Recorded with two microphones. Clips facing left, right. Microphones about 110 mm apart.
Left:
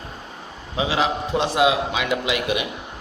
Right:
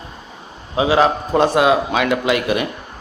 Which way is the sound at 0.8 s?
40° right (ahead or behind).